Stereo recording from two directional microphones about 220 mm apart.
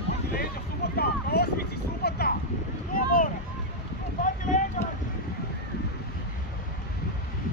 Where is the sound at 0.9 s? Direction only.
45° left (ahead or behind).